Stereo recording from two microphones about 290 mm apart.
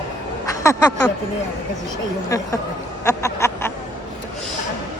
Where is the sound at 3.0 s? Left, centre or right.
Centre.